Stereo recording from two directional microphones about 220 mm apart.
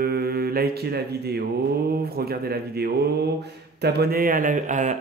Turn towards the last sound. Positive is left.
turn(degrees=-35)  # may be behind; listen again after turning